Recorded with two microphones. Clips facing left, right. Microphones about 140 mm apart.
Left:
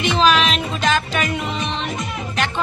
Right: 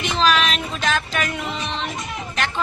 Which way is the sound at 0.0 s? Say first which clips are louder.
Left 3 dB; centre (ahead or behind).